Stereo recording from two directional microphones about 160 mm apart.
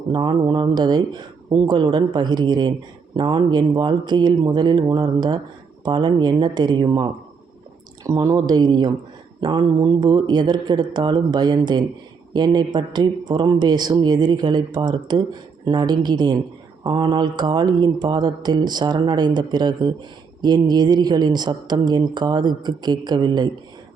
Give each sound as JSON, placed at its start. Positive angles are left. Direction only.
{"t": 0.1, "sound": "mantra", "side_deg": -30}